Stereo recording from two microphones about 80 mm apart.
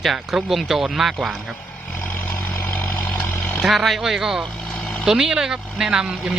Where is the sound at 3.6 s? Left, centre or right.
Centre.